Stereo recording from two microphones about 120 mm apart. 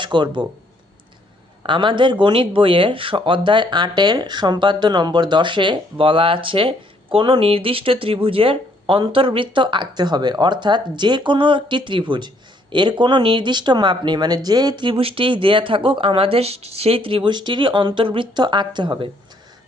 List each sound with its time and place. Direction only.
0.0 s speech: 40° right (ahead or behind)
1.6 s speech: 40° right (ahead or behind)